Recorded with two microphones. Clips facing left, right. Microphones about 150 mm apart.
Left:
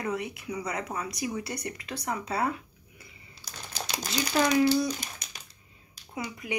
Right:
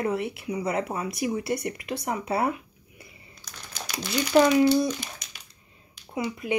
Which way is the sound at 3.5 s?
30° left (ahead or behind).